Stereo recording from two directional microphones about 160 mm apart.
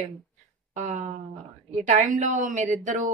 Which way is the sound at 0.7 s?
45° right (ahead or behind).